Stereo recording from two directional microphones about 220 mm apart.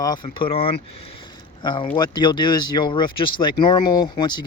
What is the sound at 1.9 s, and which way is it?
Speech, 20° left (ahead or behind).